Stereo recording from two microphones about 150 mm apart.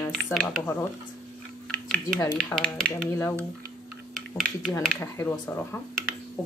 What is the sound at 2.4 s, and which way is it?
Speech, 5° left (ahead or behind).